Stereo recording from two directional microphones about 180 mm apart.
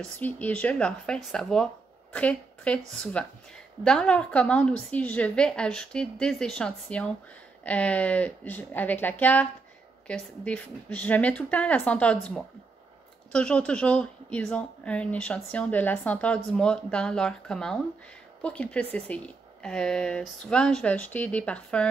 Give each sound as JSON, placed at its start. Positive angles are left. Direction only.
{"t": 0.0, "sound": "a woman's voice", "side_deg": 5}